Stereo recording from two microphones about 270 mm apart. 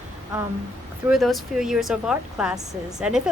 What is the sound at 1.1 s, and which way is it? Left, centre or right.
A woman's voice, centre.